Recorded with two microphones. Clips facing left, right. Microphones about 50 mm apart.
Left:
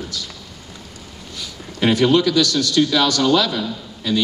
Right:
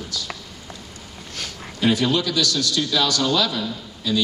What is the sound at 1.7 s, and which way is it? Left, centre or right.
A man's voice, left.